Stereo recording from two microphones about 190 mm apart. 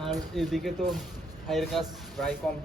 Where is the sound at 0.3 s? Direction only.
Centre (ahead or behind).